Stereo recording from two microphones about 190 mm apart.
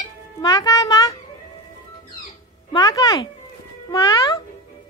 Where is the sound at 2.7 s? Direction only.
20° left (ahead or behind).